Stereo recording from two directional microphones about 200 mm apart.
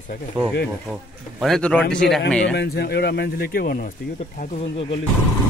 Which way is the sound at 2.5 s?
55° left (ahead or behind).